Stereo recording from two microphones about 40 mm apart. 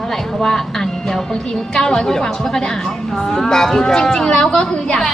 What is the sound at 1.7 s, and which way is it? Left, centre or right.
A man's voice, centre.